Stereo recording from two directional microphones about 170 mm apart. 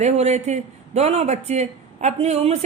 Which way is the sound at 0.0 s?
40° right (ahead or behind).